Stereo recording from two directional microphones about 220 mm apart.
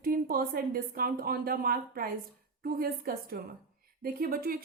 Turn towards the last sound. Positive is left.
turn(degrees=-40)  # may be behind; listen again after turning